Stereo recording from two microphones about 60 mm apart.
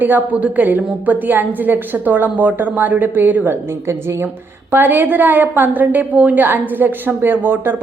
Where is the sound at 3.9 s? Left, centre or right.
Right.